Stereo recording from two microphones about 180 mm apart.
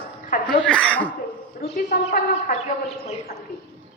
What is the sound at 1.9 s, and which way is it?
Speech, 50° left (ahead or behind).